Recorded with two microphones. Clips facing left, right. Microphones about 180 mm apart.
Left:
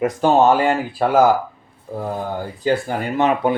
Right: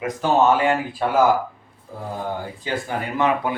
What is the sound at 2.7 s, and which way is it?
Speech, 30° left (ahead or behind).